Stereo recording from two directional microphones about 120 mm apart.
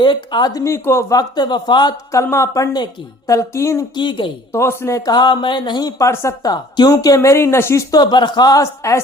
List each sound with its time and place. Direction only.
0.0 s speech: 40° left (ahead or behind); by 1.0 s 20° left (ahead or behind)
1.1 s speech: 40° left (ahead or behind)
2.1 s a woman's voice: 25° left (ahead or behind)
3.9 s speech: 40° left (ahead or behind)
4.5 s speech: 20° left (ahead or behind)